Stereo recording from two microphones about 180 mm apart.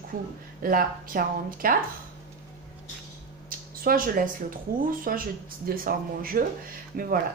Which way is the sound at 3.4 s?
55° right (ahead or behind).